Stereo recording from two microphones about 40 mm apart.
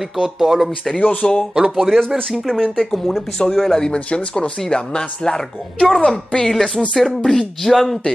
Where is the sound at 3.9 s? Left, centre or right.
Left.